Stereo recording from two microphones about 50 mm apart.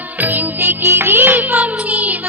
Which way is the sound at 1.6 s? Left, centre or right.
Right.